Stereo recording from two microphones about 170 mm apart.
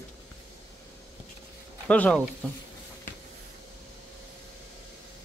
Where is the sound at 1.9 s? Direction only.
5° left (ahead or behind).